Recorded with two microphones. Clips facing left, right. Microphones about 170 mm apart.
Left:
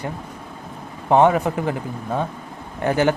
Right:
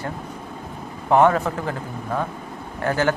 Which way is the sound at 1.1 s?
15° left (ahead or behind).